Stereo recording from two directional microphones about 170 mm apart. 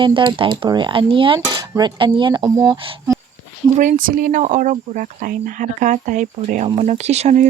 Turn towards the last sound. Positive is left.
turn(degrees=-40)  # may be behind; listen again after turning